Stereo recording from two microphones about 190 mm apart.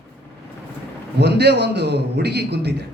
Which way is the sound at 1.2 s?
60° right (ahead or behind).